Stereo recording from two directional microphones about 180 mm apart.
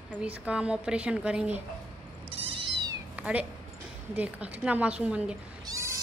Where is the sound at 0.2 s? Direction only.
5° right (ahead or behind).